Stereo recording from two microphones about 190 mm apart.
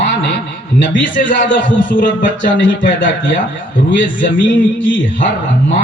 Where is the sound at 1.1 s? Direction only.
45° left (ahead or behind).